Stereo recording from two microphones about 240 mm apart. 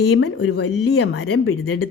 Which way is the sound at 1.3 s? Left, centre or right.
Left.